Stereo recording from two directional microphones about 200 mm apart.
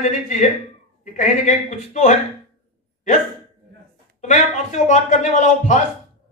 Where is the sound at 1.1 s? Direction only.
35° left (ahead or behind).